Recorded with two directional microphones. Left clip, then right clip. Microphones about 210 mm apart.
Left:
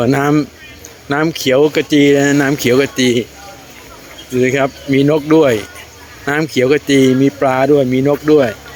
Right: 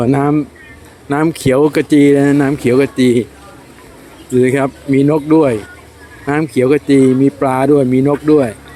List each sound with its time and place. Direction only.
0.0 s speech: 5° right (ahead or behind)
1.3 s speech: 20° right (ahead or behind)
2.2 s speech: 5° right (ahead or behind)
4.4 s speech: 20° right (ahead or behind)